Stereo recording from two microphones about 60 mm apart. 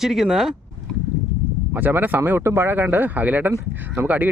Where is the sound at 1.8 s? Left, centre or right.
Right.